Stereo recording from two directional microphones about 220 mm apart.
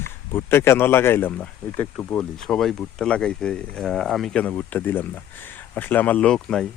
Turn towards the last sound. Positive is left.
turn(degrees=5)  # may be behind; listen again after turning